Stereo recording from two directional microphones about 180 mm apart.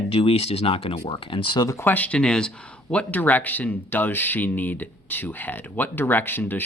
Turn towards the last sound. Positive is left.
turn(degrees=10)  # may be behind; listen again after turning